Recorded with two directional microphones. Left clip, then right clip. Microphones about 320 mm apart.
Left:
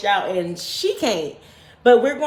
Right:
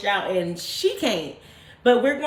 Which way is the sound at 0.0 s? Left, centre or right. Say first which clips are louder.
Left 3 dB; centre.